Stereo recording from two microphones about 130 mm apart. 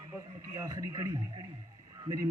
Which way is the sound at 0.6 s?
25° right (ahead or behind).